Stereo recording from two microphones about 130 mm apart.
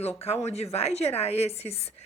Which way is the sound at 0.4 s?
55° left (ahead or behind).